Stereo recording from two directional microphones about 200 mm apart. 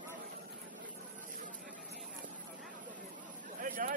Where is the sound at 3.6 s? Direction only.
45° right (ahead or behind).